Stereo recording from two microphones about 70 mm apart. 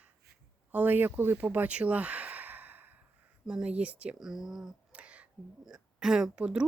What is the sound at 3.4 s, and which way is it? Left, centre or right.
Speech, centre.